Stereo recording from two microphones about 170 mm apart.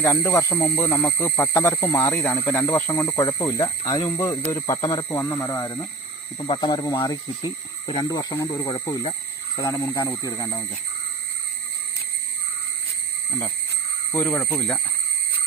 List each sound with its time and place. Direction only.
0.0 s speech: 15° left (ahead or behind); by 9.1 s 30° left (ahead or behind)
9.6 s speech: 15° left (ahead or behind)
14.1 s speech: 10° left (ahead or behind)